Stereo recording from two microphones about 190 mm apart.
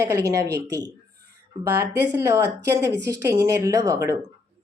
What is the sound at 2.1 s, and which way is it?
A woman's voice, 15° right (ahead or behind).